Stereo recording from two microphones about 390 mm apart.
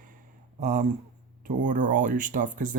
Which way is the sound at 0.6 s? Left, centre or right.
Centre.